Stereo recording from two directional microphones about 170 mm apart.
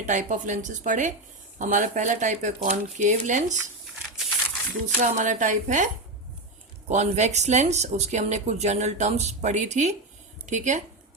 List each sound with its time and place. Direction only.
0.0 s speech: 45° right (ahead or behind)
4.9 s speech: 45° right (ahead or behind)